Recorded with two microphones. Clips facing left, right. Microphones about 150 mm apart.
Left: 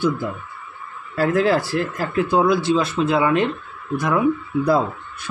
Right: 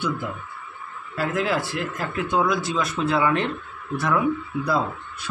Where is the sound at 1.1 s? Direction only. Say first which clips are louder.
Left 6 dB; 35° left (ahead or behind); by 4.2 s 15° left (ahead or behind).